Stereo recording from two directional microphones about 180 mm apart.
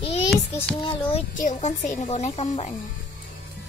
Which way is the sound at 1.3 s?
45° left (ahead or behind).